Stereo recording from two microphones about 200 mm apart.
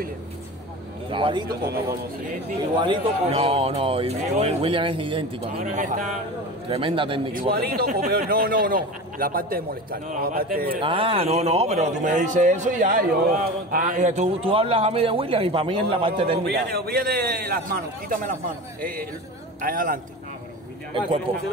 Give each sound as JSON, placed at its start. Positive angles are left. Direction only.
{"t": 1.1, "sound": "speech", "side_deg": -25}
{"t": 1.5, "sound": "speech", "side_deg": -50}
{"t": 2.8, "sound": "speech", "side_deg": -25}
{"t": 5.6, "sound": "a man's voice", "side_deg": -40}
{"t": 6.7, "sound": "speech", "side_deg": -25}
{"t": 7.6, "sound": "speech", "side_deg": -50}
{"t": 10.8, "sound": "a man's voice", "side_deg": -25}
{"t": 16.4, "sound": "speech", "side_deg": -50}
{"t": 21.3, "sound": "speech", "side_deg": -25}